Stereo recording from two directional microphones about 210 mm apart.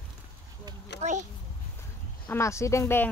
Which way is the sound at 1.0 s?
35° right (ahead or behind).